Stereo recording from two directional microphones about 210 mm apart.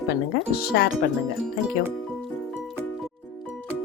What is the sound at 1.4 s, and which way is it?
Music, centre (ahead or behind).